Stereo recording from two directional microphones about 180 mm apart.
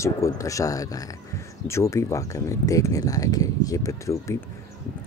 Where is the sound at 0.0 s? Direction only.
15° left (ahead or behind).